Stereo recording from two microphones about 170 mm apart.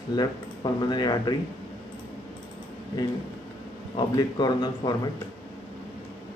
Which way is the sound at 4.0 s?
25° left (ahead or behind).